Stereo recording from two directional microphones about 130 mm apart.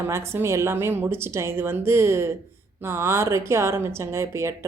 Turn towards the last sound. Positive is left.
turn(degrees=-20)  # may be behind; listen again after turning